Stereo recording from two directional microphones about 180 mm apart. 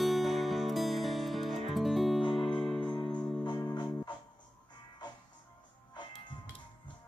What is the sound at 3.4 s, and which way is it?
Music, 25° left (ahead or behind).